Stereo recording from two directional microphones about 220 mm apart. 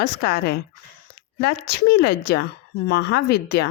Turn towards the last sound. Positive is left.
turn(degrees=50)  # may be behind; listen again after turning